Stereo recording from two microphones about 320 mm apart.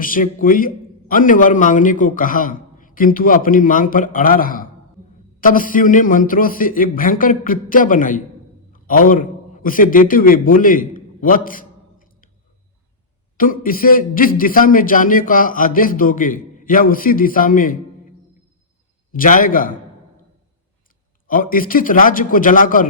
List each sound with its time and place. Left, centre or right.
0.0 s a man's voice: left
8.7 s a sound: left
13.3 s a man's voice: left
19.1 s a man's voice: left
21.2 s a man's voice: left